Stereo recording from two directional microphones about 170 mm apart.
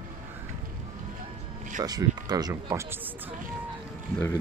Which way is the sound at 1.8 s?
25° right (ahead or behind).